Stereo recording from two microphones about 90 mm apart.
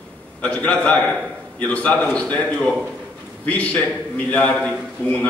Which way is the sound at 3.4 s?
15° left (ahead or behind).